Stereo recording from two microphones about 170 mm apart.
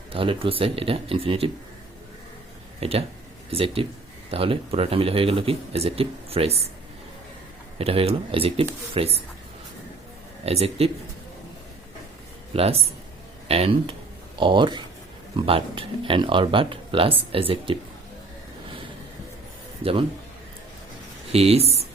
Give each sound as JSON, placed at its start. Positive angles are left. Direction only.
{"t": 0.1, "sound": "speech", "side_deg": -30}
{"t": 2.8, "sound": "speech", "side_deg": -35}
{"t": 7.8, "sound": "speech", "side_deg": -35}
{"t": 10.4, "sound": "speech", "side_deg": -35}
{"t": 12.5, "sound": "speech", "side_deg": -35}
{"t": 19.8, "sound": "a man's voice", "side_deg": -35}
{"t": 21.3, "sound": "speech", "side_deg": -35}